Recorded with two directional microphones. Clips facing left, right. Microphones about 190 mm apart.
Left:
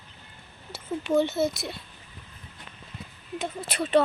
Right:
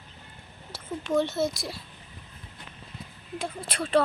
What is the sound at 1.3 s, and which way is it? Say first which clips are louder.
Speech: left 2 dB; 25° left (ahead or behind).